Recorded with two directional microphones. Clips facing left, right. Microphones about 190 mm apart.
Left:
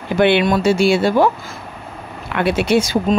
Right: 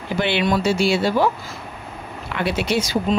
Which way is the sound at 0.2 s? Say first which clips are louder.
Left 6 dB; 55° left (ahead or behind).